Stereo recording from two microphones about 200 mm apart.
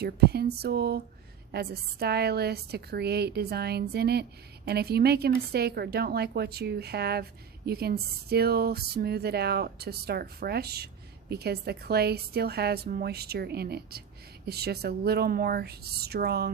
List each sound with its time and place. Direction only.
0.0 s a woman's voice: 55° right (ahead or behind)